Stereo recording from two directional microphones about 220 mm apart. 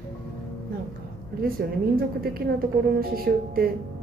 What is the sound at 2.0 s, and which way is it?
A woman's voice, 45° right (ahead or behind).